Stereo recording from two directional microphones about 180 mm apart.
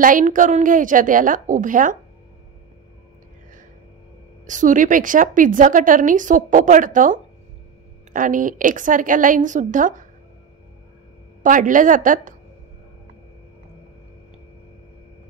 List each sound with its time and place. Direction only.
0.0 s a woman's voice: 45° right (ahead or behind)
4.5 s a woman's voice: 45° right (ahead or behind)
11.4 s a woman's voice: 45° right (ahead or behind)